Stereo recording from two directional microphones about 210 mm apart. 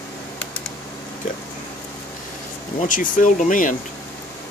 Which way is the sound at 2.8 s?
40° left (ahead or behind).